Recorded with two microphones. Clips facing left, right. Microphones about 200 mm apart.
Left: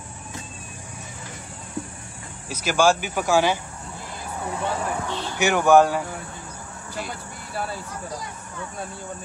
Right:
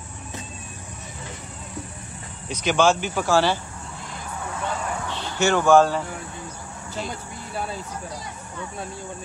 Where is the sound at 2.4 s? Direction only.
5° left (ahead or behind).